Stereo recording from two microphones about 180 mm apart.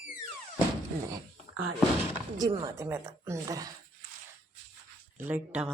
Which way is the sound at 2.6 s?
15° right (ahead or behind).